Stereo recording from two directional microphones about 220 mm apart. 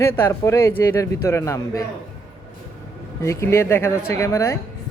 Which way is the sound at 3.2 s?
15° left (ahead or behind).